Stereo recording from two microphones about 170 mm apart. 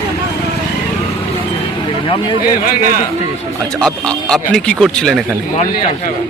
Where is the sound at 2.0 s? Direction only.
30° left (ahead or behind).